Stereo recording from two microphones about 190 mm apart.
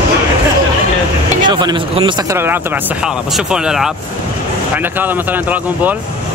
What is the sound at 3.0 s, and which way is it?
Speech, 5° right (ahead or behind).